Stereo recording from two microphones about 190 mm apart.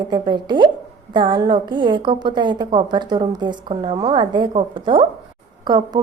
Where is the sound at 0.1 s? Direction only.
25° right (ahead or behind).